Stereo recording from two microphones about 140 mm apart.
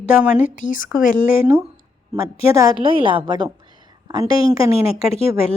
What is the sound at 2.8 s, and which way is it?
A woman's voice, 40° right (ahead or behind).